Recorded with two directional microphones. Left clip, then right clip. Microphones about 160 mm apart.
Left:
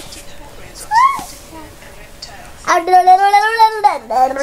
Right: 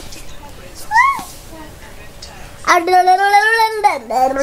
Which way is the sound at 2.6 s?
50° right (ahead or behind).